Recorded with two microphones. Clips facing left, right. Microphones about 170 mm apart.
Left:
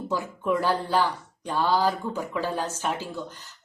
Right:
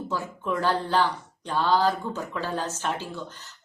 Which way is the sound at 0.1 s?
10° left (ahead or behind).